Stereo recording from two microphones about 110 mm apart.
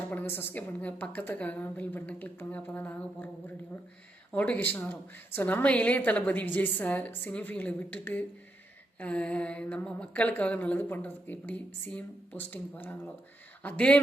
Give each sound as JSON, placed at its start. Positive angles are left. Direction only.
{"t": 0.1, "sound": "speech", "side_deg": 20}
{"t": 4.3, "sound": "speech", "side_deg": 15}